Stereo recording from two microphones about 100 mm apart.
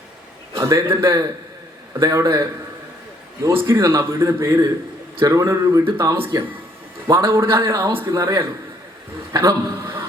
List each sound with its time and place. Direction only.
0.5 s a man's voice: 30° right (ahead or behind)
3.7 s a man's voice: 30° right (ahead or behind)